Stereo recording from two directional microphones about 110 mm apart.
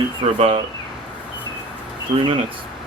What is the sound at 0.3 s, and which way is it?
Speech, 70° right (ahead or behind).